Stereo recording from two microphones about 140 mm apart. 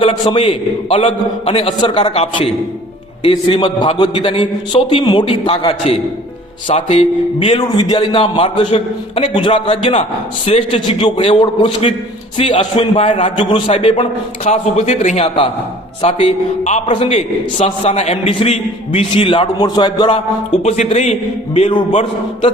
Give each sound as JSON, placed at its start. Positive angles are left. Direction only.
{"t": 0.0, "sound": "a man's voice", "side_deg": 40}
{"t": 7.8, "sound": "a man's voice", "side_deg": 35}
{"t": 20.7, "sound": "a man's voice", "side_deg": 50}